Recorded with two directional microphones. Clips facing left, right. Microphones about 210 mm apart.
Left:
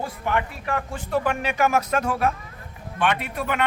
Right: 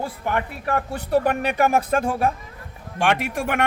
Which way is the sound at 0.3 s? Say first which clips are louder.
Right 1 dB; 40° right (ahead or behind).